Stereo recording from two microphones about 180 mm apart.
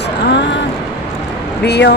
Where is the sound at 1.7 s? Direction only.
70° left (ahead or behind).